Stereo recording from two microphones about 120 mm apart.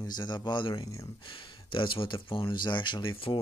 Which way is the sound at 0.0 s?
35° left (ahead or behind).